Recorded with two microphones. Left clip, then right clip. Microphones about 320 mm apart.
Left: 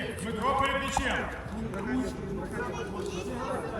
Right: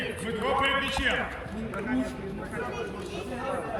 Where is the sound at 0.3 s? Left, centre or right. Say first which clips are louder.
Right 1 dB; left.